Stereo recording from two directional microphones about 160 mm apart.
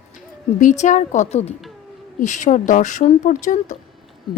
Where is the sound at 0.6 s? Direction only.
50° left (ahead or behind).